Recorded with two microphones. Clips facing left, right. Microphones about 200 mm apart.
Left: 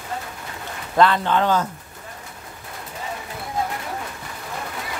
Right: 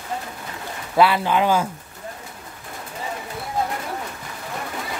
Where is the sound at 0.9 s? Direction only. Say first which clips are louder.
Even; 10° right (ahead or behind).